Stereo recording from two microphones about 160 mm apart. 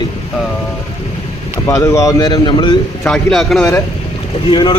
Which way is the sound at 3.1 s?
Centre (ahead or behind).